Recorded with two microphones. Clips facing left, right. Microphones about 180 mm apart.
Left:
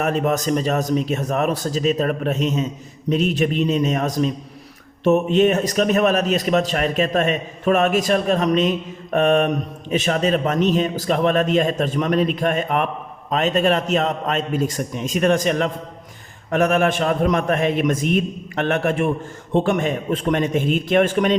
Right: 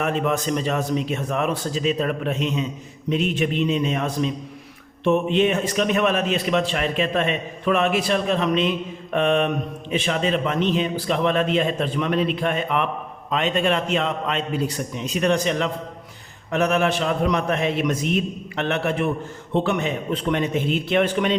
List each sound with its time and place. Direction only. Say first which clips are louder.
0.0 s a man's voice: left 2 dB; 40° left (ahead or behind)